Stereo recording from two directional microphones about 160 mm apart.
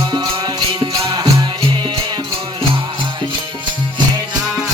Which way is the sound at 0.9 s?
20° right (ahead or behind).